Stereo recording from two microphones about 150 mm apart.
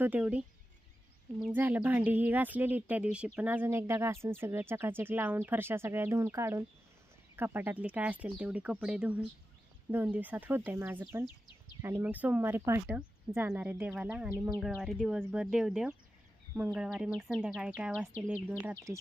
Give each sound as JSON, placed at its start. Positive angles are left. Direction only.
{"t": 0.0, "sound": "speech", "side_deg": -10}
{"t": 1.5, "sound": "speech", "side_deg": -10}
{"t": 14.6, "sound": "speech", "side_deg": 0}